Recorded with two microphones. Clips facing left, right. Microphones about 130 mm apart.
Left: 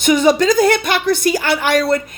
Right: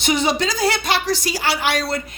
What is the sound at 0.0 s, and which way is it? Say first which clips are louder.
A woman's voice: left 7 dB; 50° left (ahead or behind).